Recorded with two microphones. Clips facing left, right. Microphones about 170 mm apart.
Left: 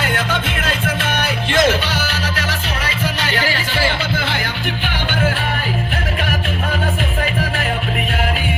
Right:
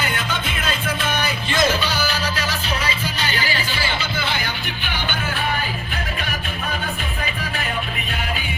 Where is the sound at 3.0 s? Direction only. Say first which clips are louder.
Left 5 dB; 85° left.